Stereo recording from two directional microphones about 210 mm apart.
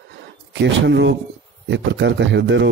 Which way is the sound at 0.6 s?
60° right (ahead or behind).